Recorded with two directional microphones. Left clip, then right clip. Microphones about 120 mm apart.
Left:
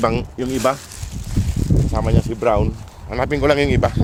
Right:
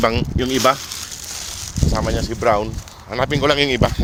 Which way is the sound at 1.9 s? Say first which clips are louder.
Right 3 dB; 45° left (ahead or behind).